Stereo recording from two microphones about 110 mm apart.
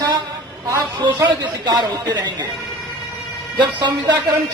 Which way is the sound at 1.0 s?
40° right (ahead or behind).